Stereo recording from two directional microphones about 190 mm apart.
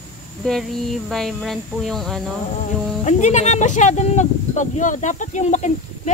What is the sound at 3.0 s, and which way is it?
Speech, 40° left (ahead or behind).